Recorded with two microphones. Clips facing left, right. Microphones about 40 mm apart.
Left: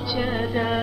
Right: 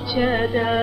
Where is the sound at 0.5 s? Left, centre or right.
Centre.